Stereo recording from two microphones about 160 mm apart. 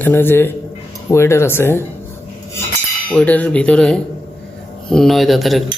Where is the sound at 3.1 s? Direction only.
10° left (ahead or behind).